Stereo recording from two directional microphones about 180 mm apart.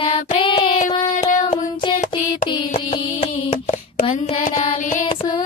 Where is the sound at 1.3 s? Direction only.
45° left (ahead or behind).